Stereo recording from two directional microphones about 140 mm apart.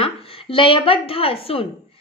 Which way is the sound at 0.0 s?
40° left (ahead or behind).